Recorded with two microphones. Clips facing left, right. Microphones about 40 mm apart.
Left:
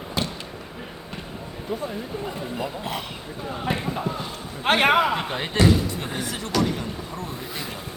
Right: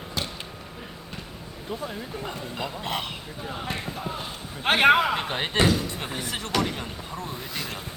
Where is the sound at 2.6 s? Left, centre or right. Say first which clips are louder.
Right 1 dB; right.